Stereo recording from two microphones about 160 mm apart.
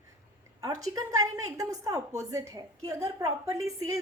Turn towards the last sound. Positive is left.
turn(degrees=-20)  # may be behind; listen again after turning